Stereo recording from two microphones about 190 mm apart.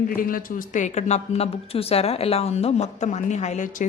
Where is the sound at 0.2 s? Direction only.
45° left (ahead or behind).